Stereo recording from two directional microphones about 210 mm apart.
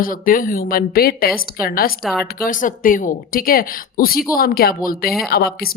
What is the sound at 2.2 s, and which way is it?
A woman's voice, 40° left (ahead or behind).